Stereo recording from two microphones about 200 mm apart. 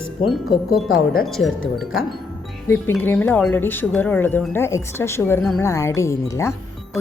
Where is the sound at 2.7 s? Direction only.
10° left (ahead or behind).